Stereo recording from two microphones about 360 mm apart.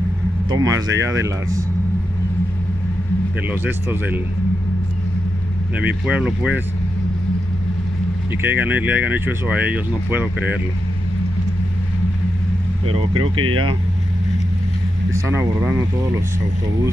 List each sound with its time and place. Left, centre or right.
0.5 s speech: centre
3.4 s speech: centre
5.9 s speech: centre
8.3 s speech: centre
13.4 s speech: right
15.2 s speech: centre